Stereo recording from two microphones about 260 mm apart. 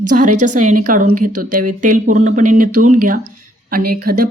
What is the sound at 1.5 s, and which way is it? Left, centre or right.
A woman's voice, right.